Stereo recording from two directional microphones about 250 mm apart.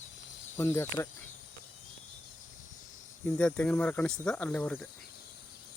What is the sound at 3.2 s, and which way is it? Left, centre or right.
Speech, centre.